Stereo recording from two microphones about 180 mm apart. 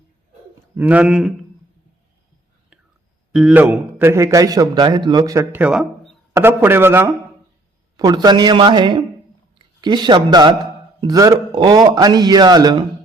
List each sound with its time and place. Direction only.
0.8 s speech: 10° right (ahead or behind)
3.3 s a man's voice: 5° right (ahead or behind); by 12.8 s 20° right (ahead or behind)